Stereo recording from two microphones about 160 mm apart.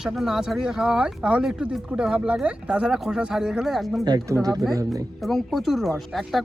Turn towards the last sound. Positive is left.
turn(degrees=0)  # may be behind; listen again after turning